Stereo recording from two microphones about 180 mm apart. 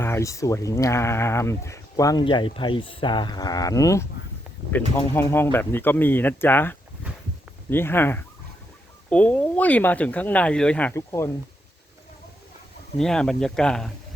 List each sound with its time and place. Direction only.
0.0 s speech: 15° left (ahead or behind)
13.0 s speech: 5° left (ahead or behind)